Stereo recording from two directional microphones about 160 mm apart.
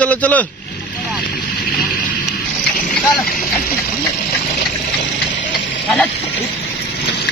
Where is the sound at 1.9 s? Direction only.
65° left (ahead or behind).